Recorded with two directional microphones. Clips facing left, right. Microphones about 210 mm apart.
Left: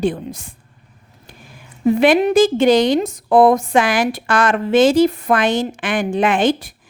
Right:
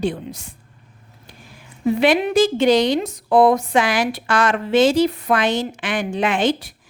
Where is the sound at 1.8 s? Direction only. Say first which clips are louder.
Left 4 dB; 50° left (ahead or behind).